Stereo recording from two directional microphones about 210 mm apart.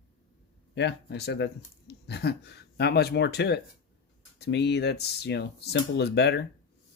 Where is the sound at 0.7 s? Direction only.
55° left (ahead or behind).